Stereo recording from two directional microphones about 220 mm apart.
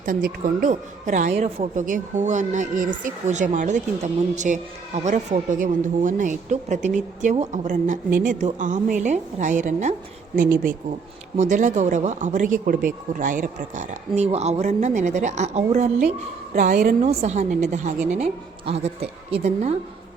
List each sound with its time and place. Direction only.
0.0 s a woman's voice: 40° right (ahead or behind)
17.1 s a woman's voice: 30° right (ahead or behind)